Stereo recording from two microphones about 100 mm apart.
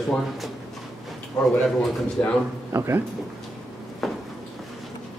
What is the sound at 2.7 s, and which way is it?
Speech, 25° right (ahead or behind).